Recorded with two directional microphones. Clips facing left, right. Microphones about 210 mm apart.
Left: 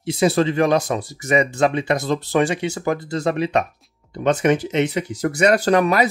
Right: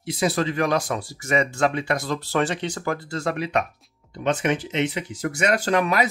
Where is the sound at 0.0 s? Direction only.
25° left (ahead or behind).